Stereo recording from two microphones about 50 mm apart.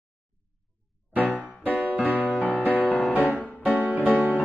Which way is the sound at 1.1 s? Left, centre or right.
Left.